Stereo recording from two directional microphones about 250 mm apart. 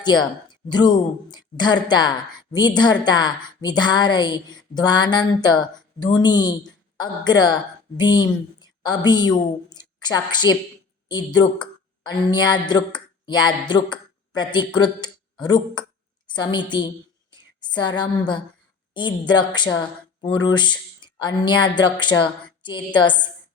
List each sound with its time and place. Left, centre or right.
0.4 s a woman's voice: centre
12.3 s speech: centre
17.3 s a sound: centre
18.9 s speech: centre